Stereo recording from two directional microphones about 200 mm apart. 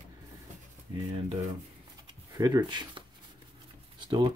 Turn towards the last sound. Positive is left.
turn(degrees=-25)  # may be behind; listen again after turning